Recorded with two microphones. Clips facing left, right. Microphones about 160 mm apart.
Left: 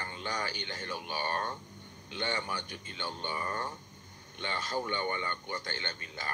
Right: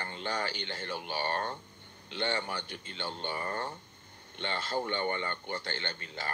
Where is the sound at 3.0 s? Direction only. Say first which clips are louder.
Right 1 dB; 30° right (ahead or behind).